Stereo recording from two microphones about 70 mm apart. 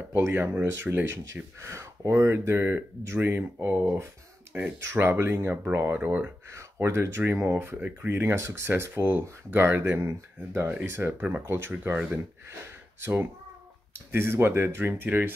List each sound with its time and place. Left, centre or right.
0.1 s speech: right
6.5 s speech: right
8.6 s speech: right
13.0 s speech: right